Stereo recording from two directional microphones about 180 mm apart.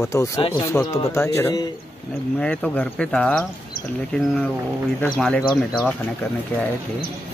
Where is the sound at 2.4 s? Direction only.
5° left (ahead or behind).